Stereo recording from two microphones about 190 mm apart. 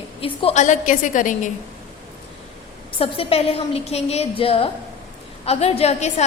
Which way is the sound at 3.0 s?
30° left (ahead or behind).